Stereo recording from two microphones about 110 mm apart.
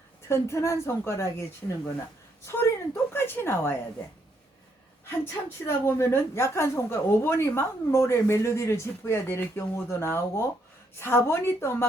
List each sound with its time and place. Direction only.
0.3 s a woman's voice: 25° left (ahead or behind)
5.0 s a woman's voice: 20° left (ahead or behind)